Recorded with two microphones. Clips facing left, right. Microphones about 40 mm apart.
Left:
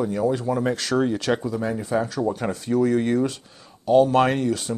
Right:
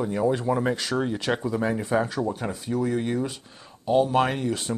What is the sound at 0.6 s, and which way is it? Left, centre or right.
Speech, centre.